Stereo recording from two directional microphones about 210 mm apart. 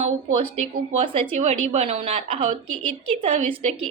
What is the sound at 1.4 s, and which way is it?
A woman's voice, 30° right (ahead or behind).